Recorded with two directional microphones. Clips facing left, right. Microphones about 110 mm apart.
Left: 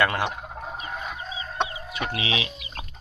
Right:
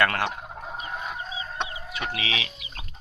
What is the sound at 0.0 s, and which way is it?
Speech, 10° left (ahead or behind).